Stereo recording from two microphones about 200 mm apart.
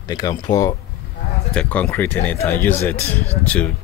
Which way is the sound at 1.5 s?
5° left (ahead or behind).